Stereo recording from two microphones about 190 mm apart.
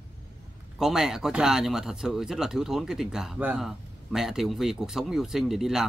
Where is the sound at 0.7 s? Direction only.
5° right (ahead or behind).